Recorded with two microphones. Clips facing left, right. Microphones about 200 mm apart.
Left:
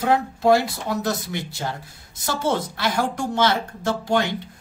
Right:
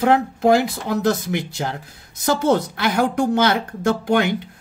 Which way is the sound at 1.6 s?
60° right (ahead or behind).